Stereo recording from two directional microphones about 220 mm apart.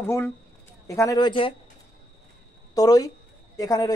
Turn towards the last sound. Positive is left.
turn(degrees=15)  # may be behind; listen again after turning